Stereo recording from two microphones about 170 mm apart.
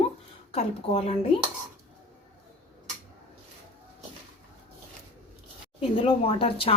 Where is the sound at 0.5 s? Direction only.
35° left (ahead or behind).